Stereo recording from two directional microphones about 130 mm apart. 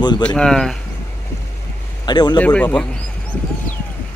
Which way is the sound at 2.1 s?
35° left (ahead or behind).